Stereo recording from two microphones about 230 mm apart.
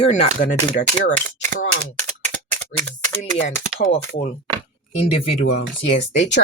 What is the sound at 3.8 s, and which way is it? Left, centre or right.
Speech, left.